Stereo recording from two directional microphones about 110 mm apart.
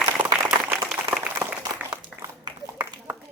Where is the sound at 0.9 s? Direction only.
5° right (ahead or behind).